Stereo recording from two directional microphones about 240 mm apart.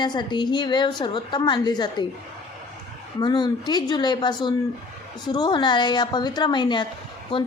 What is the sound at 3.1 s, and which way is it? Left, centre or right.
A woman's voice, centre.